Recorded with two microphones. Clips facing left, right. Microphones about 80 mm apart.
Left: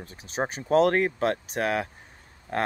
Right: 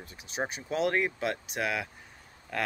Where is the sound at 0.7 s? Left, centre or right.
Left.